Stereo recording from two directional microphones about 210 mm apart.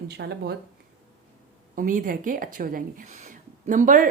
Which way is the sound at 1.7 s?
40° right (ahead or behind).